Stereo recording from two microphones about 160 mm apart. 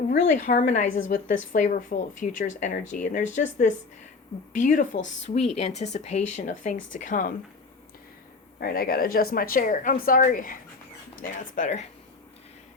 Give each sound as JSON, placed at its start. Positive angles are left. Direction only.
{"t": 0.3, "sound": "a woman's voice", "side_deg": 50}
{"t": 8.6, "sound": "a woman's voice", "side_deg": 65}